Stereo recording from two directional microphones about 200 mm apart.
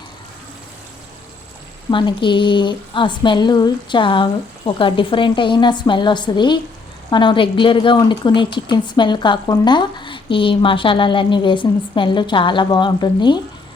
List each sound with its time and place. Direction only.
1.9 s a woman's voice: 25° left (ahead or behind)